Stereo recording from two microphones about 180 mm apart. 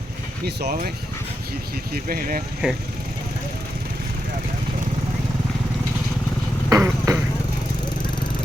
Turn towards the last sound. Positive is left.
turn(degrees=-20)  # may be behind; listen again after turning